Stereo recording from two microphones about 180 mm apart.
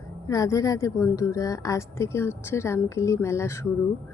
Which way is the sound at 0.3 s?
20° left (ahead or behind).